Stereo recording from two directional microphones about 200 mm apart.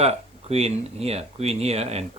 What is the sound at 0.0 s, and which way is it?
Speech, 30° right (ahead or behind).